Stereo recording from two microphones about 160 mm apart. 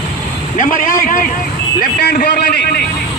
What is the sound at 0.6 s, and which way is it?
Speech, 60° left (ahead or behind).